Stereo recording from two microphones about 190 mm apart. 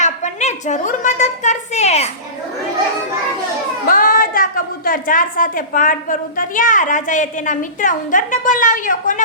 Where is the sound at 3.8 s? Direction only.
50° left (ahead or behind).